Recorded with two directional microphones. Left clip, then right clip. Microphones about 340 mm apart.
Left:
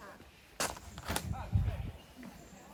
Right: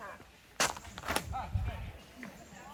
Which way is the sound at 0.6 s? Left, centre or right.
Centre.